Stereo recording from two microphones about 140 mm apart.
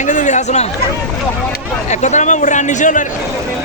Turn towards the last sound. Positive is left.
turn(degrees=65)  # may be behind; listen again after turning